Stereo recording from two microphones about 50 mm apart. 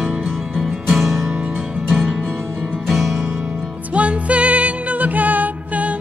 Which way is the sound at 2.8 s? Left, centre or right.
Centre.